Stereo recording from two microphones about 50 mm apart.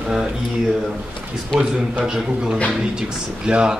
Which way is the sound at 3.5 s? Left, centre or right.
Centre.